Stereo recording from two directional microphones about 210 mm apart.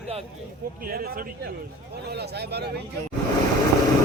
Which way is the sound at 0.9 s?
45° right (ahead or behind).